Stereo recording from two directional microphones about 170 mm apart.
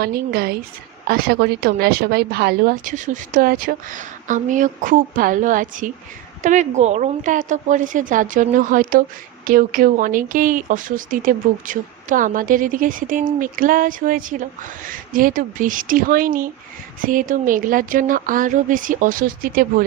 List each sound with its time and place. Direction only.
0.0 s a woman's voice: 65° right (ahead or behind)